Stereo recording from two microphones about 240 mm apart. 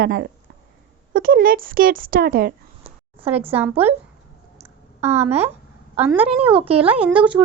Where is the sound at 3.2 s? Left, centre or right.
Right.